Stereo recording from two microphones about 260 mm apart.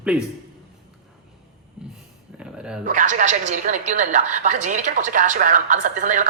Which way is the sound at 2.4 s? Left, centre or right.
Centre.